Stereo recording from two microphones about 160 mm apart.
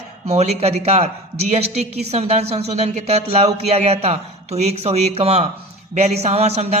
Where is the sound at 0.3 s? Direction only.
40° right (ahead or behind).